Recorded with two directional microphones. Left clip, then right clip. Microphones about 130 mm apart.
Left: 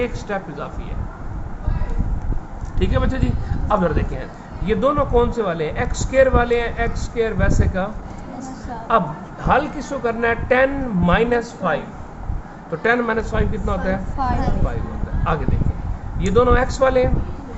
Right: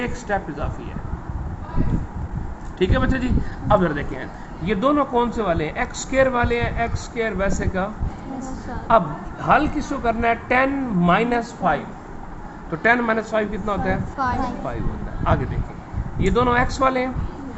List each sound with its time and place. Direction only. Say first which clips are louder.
0.0 s a man's voice: left 1 dB; 20° right (ahead or behind)
2.7 s a man's voice: right 2 dB; 30° right (ahead or behind)
8.9 s a man's voice: right 1 dB; 20° right (ahead or behind)
12.8 s a man's voice: even; 25° right (ahead or behind)
16.1 s a man's voice: left 2 dB; 20° right (ahead or behind)